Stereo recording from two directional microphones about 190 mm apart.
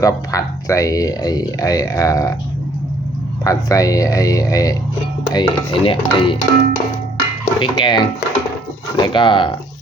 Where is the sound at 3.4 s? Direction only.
15° left (ahead or behind).